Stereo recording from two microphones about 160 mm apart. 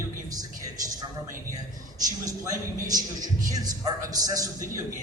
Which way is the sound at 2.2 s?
25° right (ahead or behind).